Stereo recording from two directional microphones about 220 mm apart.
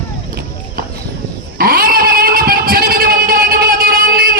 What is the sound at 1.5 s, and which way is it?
Cat, 40° right (ahead or behind).